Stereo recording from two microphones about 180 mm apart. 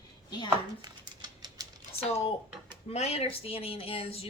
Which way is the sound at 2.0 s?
35° left (ahead or behind).